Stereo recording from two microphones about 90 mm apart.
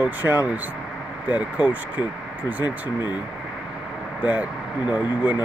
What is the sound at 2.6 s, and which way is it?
Speech, 55° left (ahead or behind).